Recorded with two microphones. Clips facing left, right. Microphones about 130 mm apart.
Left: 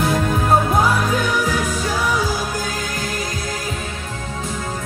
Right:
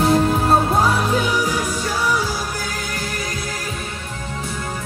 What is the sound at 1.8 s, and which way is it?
Music, 15° left (ahead or behind).